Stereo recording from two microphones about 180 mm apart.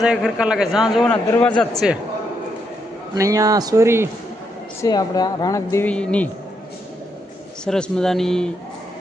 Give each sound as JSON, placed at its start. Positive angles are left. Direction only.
{"t": 0.0, "sound": "a man's voice", "side_deg": -5}
{"t": 1.1, "sound": "speech", "side_deg": 10}
{"t": 1.8, "sound": "a man's voice", "side_deg": -5}
{"t": 3.2, "sound": "speech", "side_deg": -20}
{"t": 4.8, "sound": "speech", "side_deg": 20}
{"t": 7.6, "sound": "a man's voice", "side_deg": 5}